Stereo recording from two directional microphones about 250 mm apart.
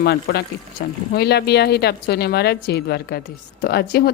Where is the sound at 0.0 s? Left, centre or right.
Left.